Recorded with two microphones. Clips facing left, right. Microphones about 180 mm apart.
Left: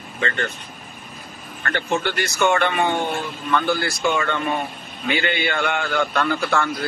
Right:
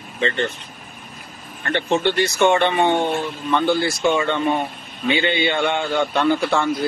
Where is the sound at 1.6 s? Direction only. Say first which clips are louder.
Right 3 dB; 20° right (ahead or behind).